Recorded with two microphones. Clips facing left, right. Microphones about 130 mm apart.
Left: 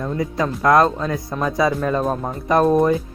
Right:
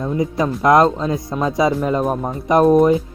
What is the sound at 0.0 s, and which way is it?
Speech, 15° right (ahead or behind).